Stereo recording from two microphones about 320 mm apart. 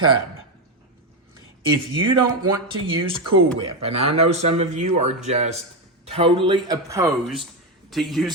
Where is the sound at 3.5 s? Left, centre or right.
Centre.